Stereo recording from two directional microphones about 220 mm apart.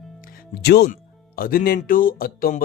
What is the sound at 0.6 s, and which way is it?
Speech, 45° left (ahead or behind).